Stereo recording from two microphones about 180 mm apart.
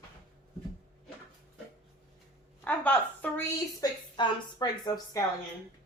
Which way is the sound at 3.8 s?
25° left (ahead or behind).